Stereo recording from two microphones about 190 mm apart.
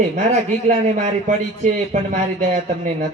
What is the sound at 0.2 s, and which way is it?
Speech, 35° right (ahead or behind).